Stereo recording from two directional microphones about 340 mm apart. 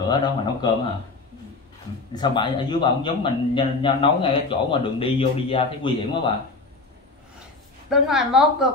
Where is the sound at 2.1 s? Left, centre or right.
Centre.